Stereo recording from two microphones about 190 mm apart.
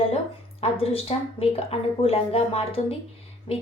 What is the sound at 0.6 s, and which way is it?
A woman's voice, 30° left (ahead or behind).